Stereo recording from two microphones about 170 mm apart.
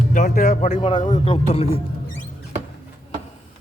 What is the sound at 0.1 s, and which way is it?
A man's voice, 50° left (ahead or behind).